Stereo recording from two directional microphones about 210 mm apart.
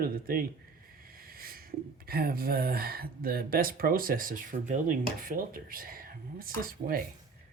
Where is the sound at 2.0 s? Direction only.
45° right (ahead or behind).